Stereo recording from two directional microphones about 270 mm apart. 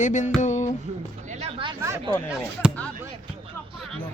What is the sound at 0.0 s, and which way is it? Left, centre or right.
Speech, left.